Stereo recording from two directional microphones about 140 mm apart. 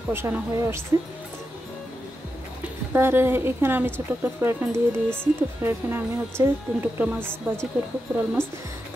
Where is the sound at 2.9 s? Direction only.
15° right (ahead or behind).